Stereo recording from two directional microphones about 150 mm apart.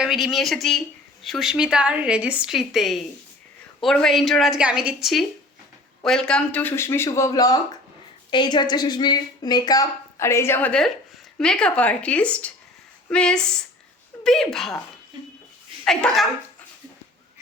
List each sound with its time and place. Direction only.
0.0 s a woman's voice: centre (ahead or behind)
15.8 s speech: 5° left (ahead or behind)